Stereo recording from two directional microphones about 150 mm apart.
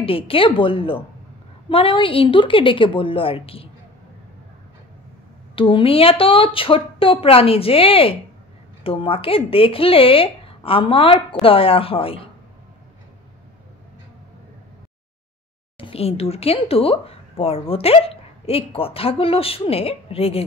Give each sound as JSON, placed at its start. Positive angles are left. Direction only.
{"t": 0.0, "sound": "speech", "side_deg": 35}
{"t": 5.6, "sound": "speech", "side_deg": 35}
{"t": 15.8, "sound": "speech", "side_deg": 40}